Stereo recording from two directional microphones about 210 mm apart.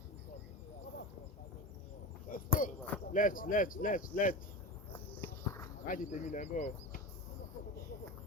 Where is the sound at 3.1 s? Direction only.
40° left (ahead or behind).